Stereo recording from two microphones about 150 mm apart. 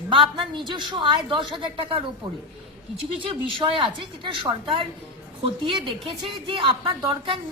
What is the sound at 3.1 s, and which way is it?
A woman's voice, 35° right (ahead or behind).